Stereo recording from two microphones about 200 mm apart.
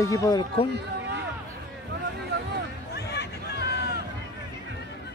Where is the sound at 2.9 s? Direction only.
55° left (ahead or behind).